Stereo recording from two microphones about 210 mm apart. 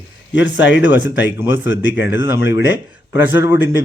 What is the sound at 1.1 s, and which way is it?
A man's voice, 10° right (ahead or behind).